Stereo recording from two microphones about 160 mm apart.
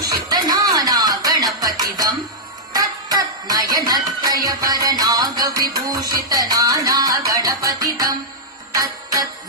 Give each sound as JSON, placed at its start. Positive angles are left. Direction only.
{"t": 0.0, "sound": "music", "side_deg": -25}